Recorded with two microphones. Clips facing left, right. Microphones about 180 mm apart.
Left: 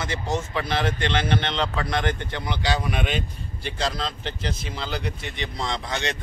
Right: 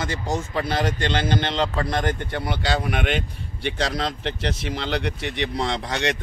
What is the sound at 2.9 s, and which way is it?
Speech, 65° right (ahead or behind).